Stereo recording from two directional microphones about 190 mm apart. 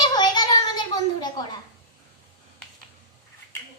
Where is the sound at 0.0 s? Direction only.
20° left (ahead or behind).